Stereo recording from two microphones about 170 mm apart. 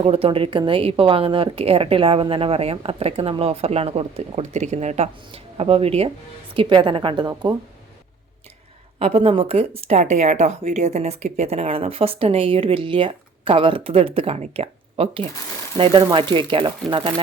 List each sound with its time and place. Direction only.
0.0 s speech: 35° right (ahead or behind)
9.0 s speech: 35° right (ahead or behind)